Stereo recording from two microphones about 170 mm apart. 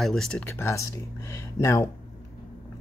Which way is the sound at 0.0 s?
5° left (ahead or behind).